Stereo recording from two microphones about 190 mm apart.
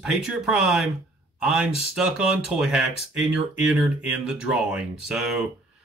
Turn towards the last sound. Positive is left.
turn(degrees=0)  # may be behind; listen again after turning